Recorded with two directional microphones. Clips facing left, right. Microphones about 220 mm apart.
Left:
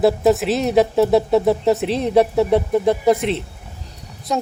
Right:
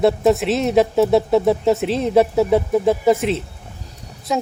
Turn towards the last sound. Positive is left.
turn(degrees=0)  # may be behind; listen again after turning